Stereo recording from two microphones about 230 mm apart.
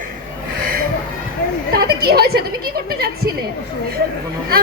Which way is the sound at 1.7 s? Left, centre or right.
Right.